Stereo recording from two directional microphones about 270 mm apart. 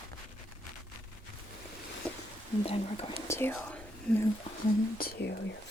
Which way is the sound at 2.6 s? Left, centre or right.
Left.